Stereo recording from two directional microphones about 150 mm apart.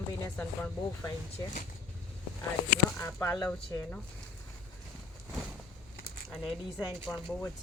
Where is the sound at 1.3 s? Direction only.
50° left (ahead or behind).